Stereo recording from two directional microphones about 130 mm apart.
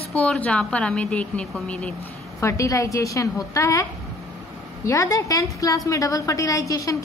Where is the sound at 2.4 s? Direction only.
25° left (ahead or behind).